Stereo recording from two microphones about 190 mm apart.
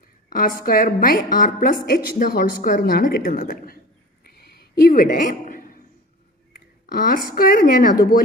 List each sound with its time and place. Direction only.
0.3 s a woman's voice: 45° left (ahead or behind)
4.3 s a sound: 55° left (ahead or behind)
6.5 s speech: 50° left (ahead or behind)